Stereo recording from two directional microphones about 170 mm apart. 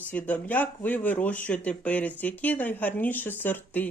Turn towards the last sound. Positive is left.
turn(degrees=10)  # may be behind; listen again after turning